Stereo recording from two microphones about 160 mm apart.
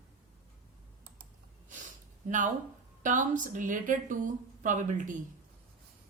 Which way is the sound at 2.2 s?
55° right (ahead or behind).